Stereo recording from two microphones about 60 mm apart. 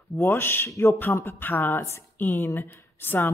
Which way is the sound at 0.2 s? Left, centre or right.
Left.